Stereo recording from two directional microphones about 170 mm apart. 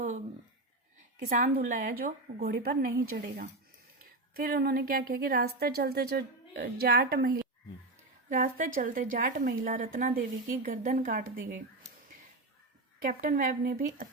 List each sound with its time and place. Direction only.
1.3 s a woman's voice: 55° right (ahead or behind)
13.0 s a woman's voice: 55° right (ahead or behind)